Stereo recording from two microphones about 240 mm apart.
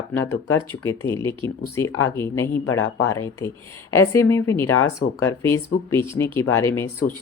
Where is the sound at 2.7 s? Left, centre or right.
Left.